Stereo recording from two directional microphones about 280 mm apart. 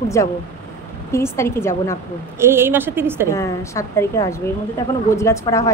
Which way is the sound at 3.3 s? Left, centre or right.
Centre.